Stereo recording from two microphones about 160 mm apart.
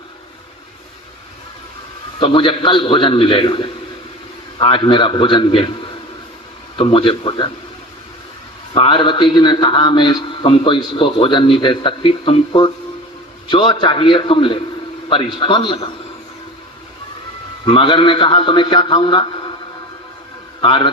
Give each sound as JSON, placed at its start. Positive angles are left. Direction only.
{"t": 2.1, "sound": "a man's voice", "side_deg": 30}
{"t": 8.7, "sound": "a man's voice", "side_deg": 30}
{"t": 17.7, "sound": "a man's voice", "side_deg": 30}
{"t": 20.6, "sound": "a man's voice", "side_deg": 30}